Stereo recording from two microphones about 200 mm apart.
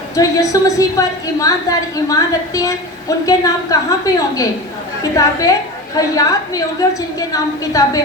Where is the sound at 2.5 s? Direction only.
15° left (ahead or behind).